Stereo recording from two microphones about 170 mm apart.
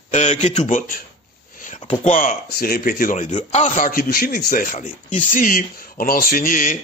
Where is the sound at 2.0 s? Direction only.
50° left (ahead or behind).